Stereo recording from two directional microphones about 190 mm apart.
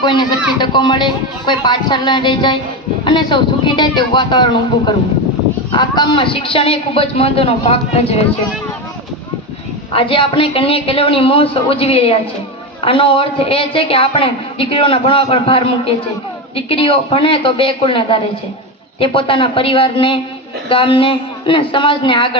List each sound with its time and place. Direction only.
0.0 s a woman's voice: 25° left (ahead or behind)
9.9 s a woman's voice: 30° left (ahead or behind)